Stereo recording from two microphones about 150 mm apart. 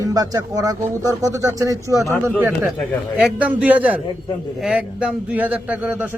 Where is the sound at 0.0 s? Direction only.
25° right (ahead or behind).